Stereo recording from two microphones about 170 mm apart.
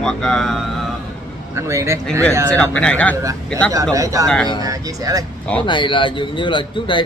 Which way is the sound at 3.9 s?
20° right (ahead or behind).